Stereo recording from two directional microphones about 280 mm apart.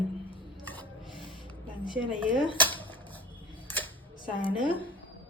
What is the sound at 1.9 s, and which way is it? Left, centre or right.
Speech, centre.